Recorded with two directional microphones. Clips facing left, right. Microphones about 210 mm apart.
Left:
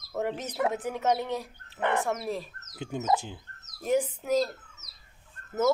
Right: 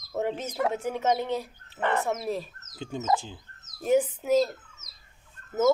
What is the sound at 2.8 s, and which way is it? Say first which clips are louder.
Speech: even; 10° left (ahead or behind).